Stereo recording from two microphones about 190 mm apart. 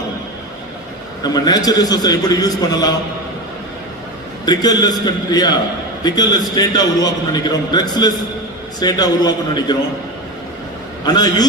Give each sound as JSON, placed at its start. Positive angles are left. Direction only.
{"t": 1.2, "sound": "a man's voice", "side_deg": 20}
{"t": 4.4, "sound": "a man's voice", "side_deg": 20}
{"t": 11.0, "sound": "a man's voice", "side_deg": 20}